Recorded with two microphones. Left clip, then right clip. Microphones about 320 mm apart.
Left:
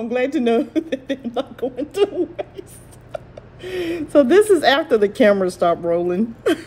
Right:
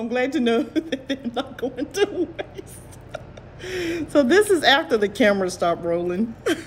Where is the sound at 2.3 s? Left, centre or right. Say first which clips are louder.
Left 3 dB; centre.